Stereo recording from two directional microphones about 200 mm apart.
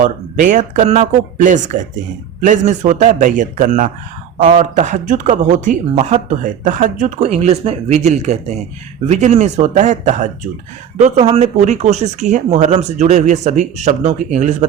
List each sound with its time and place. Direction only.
0.0 s speech: 40° right (ahead or behind)